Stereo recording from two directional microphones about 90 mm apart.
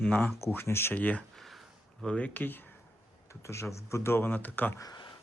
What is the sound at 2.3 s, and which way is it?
Speech, 20° left (ahead or behind).